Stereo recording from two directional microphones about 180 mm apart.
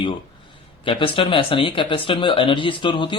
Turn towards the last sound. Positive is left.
turn(degrees=25)  # may be behind; listen again after turning